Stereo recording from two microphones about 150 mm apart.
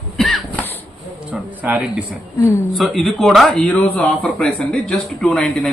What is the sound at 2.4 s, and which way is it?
Speech, 15° left (ahead or behind).